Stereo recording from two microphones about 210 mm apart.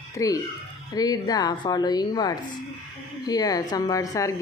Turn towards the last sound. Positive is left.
turn(degrees=15)  # may be behind; listen again after turning